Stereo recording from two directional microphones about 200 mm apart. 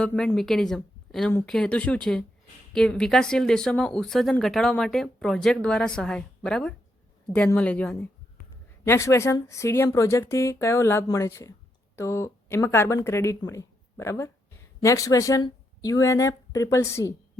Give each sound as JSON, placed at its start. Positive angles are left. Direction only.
{"t": 0.0, "sound": "speech", "side_deg": 5}